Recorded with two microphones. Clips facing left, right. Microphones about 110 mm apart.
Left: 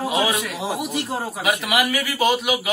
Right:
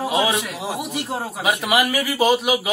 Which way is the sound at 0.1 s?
15° right (ahead or behind).